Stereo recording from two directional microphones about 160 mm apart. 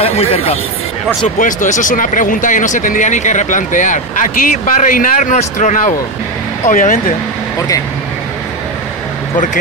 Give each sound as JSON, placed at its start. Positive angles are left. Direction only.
{"t": 0.0, "sound": "speech", "side_deg": 40}
{"t": 1.4, "sound": "speech", "side_deg": 55}